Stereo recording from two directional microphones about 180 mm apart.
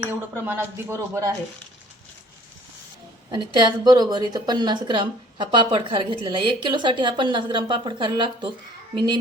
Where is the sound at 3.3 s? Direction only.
25° right (ahead or behind).